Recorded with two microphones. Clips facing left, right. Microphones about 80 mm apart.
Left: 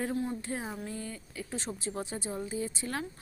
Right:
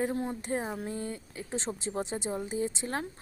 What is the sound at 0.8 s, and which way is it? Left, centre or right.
Speech, right.